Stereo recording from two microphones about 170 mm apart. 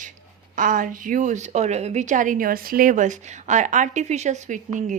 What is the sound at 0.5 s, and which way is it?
Speech, 50° right (ahead or behind).